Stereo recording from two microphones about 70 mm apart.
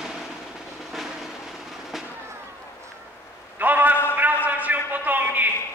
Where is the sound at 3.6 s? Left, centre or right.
Right.